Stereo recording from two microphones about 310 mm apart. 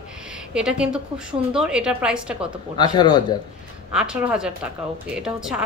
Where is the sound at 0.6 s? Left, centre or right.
Centre.